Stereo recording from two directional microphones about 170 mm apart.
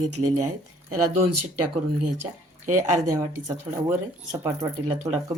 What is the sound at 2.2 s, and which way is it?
Speech, 45° right (ahead or behind).